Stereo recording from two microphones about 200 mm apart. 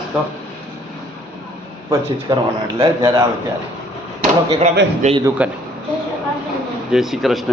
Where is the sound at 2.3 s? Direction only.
20° right (ahead or behind).